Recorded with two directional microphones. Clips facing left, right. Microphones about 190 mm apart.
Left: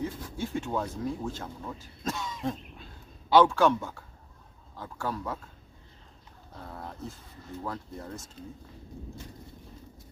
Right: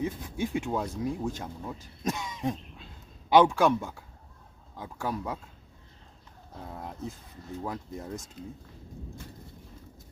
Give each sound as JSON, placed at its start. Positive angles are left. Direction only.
{"t": 0.0, "sound": "speech", "side_deg": -20}
{"t": 6.7, "sound": "speech", "side_deg": -15}